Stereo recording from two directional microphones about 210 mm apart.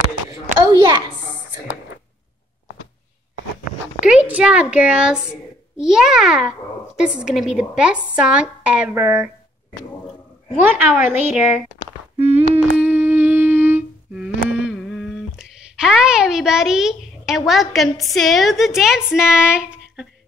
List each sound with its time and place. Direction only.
4.0 s a child's voice: 5° right (ahead or behind)
10.6 s a woman's voice: 10° right (ahead or behind)
12.2 s humming: 30° right (ahead or behind)
12.5 s humming: 5° right (ahead or behind)
17.5 s a woman's voice: centre (ahead or behind)